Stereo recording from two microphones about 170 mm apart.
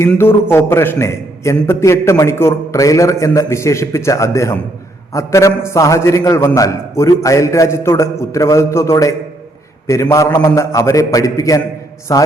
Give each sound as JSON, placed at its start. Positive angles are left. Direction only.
{"t": 0.1, "sound": "a man's voice", "side_deg": 15}